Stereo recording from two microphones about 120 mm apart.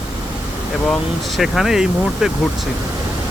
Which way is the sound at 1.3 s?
Centre (ahead or behind).